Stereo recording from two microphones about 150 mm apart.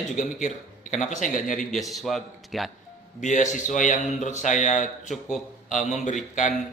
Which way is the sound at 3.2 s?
55° left (ahead or behind).